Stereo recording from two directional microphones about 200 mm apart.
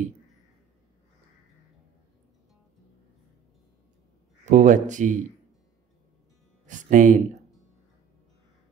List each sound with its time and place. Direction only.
4.5 s speech: 40° right (ahead or behind)
6.6 s speech: 40° right (ahead or behind)